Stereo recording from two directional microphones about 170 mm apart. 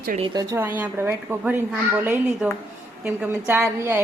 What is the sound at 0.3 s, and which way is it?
A woman's voice, 15° right (ahead or behind).